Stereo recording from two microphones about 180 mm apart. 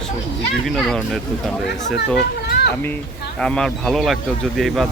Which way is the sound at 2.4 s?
65° left (ahead or behind).